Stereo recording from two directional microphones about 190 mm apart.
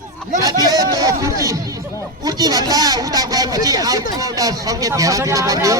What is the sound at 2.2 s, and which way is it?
A man's voice, 20° right (ahead or behind).